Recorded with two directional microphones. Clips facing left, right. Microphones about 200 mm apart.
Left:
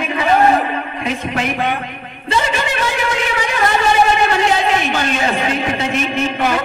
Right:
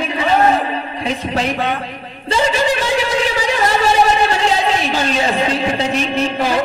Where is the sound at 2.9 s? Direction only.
35° right (ahead or behind).